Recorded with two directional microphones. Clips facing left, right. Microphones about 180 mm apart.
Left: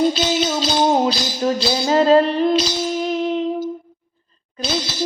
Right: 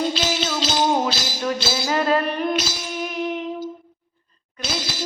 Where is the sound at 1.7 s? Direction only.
25° left (ahead or behind).